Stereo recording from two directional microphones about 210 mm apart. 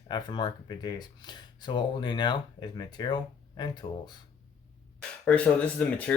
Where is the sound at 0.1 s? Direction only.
20° left (ahead or behind).